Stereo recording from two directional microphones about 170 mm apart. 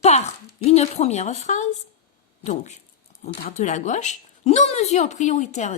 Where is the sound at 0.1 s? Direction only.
40° left (ahead or behind).